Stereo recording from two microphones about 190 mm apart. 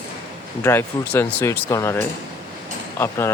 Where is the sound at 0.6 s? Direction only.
15° left (ahead or behind).